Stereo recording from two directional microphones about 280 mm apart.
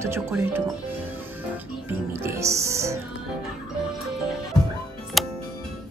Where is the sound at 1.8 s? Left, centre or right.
Centre.